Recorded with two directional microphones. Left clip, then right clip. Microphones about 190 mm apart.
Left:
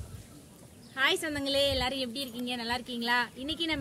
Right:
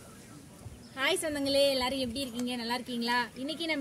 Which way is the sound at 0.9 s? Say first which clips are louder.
Left 2 dB; 5° left (ahead or behind).